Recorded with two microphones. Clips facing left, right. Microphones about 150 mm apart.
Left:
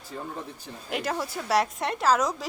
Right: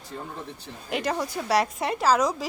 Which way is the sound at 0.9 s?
Centre (ahead or behind).